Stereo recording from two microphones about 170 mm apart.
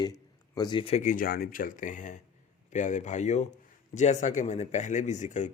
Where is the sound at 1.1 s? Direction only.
60° left (ahead or behind).